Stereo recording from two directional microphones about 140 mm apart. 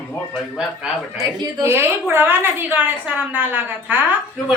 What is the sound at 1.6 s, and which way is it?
A woman's voice, 15° right (ahead or behind).